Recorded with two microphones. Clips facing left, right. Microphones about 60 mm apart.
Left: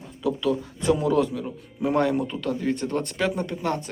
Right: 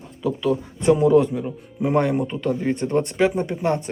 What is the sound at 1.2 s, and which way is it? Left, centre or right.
Speech, right.